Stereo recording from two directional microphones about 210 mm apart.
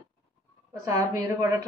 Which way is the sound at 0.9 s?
15° right (ahead or behind).